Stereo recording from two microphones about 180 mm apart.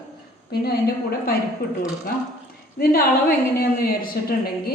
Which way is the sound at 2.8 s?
55° left (ahead or behind).